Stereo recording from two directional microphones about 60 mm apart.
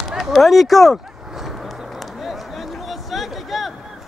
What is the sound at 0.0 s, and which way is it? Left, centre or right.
Speech, centre.